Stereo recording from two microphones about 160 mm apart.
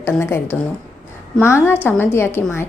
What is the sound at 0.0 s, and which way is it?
A woman's voice, 15° left (ahead or behind).